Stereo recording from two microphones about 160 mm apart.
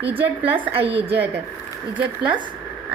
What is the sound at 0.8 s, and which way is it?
Speech, 35° right (ahead or behind).